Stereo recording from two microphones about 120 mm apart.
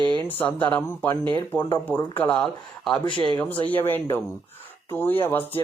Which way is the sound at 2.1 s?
15° left (ahead or behind).